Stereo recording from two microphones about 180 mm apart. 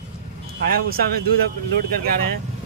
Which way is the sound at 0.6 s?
55° right (ahead or behind).